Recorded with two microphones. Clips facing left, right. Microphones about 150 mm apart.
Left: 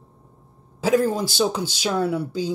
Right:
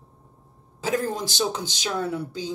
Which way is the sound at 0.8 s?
10° left (ahead or behind).